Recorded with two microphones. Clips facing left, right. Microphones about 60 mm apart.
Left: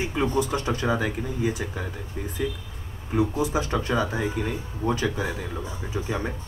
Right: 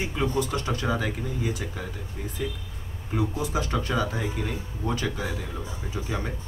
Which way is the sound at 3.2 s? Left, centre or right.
Centre.